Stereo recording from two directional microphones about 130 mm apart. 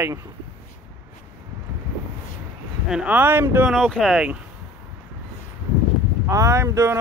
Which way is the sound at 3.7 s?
Centre (ahead or behind).